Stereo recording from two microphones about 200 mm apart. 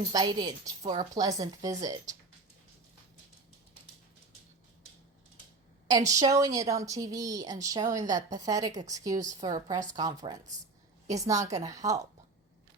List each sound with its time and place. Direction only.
0.1 s a woman's voice: 20° right (ahead or behind)
5.9 s a woman's voice: 15° right (ahead or behind)